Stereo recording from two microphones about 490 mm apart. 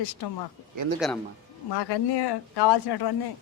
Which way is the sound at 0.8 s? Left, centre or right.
Right.